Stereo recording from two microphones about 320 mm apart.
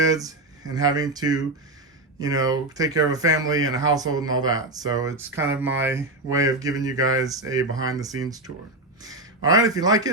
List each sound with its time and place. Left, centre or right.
0.1 s speech: centre